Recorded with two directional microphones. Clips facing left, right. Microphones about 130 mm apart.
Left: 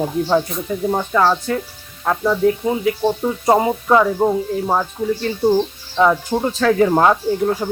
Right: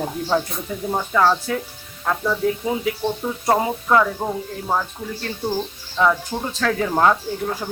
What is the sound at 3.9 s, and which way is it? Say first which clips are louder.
Speech: left 5 dB; 15° left (ahead or behind).